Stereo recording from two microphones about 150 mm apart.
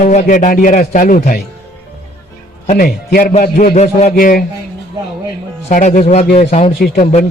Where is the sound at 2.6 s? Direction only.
75° left (ahead or behind).